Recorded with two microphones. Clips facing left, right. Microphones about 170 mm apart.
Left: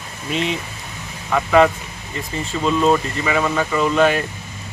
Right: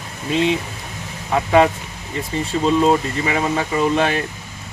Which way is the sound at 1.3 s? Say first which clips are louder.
Even; 25° right (ahead or behind).